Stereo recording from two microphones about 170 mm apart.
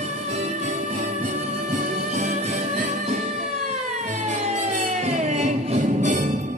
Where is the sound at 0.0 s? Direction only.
45° right (ahead or behind).